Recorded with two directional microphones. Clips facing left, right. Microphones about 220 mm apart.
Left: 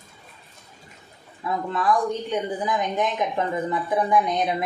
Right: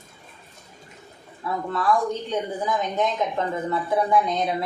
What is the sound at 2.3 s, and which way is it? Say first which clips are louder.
A woman's voice: even; 15° left (ahead or behind).